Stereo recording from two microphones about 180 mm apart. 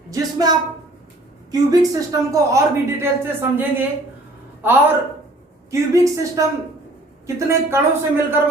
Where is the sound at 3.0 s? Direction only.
10° right (ahead or behind).